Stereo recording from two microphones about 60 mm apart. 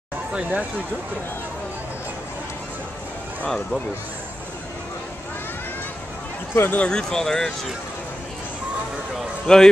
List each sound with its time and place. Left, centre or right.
0.3 s speech: right
3.4 s speech: centre
6.5 s speech: left
6.9 s speech: centre
9.5 s speech: centre